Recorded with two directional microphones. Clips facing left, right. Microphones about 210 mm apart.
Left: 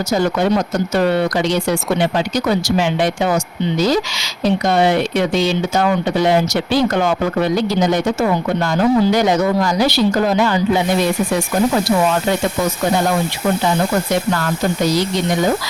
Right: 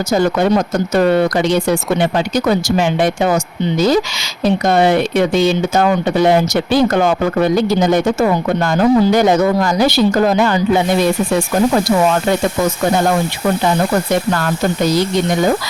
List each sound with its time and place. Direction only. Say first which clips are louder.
0.9 s speech: right 4 dB; 50° right (ahead or behind)